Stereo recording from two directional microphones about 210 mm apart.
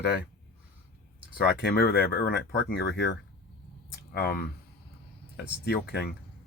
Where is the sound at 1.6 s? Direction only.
45° left (ahead or behind).